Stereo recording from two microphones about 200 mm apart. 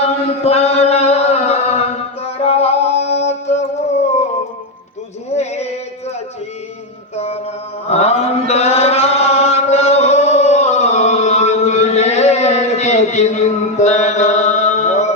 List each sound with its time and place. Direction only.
0.0 s music: 30° left (ahead or behind)
5.3 s a sound: 35° left (ahead or behind)
7.9 s chant: 30° left (ahead or behind)